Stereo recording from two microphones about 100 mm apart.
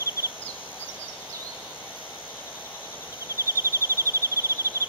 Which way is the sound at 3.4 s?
30° right (ahead or behind).